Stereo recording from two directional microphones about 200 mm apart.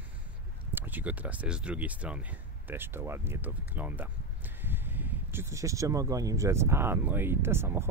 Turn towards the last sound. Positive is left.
turn(degrees=-10)  # may be behind; listen again after turning